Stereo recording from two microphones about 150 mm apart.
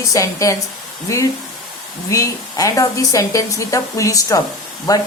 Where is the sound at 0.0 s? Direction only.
20° left (ahead or behind).